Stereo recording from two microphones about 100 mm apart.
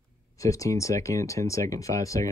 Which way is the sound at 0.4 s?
35° left (ahead or behind).